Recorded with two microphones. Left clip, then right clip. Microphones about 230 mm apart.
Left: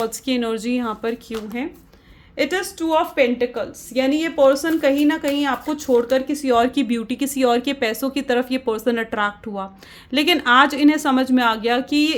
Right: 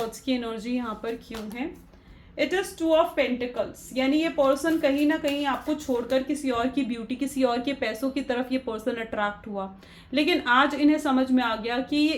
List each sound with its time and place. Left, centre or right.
0.1 s speech: left
2.3 s speech: left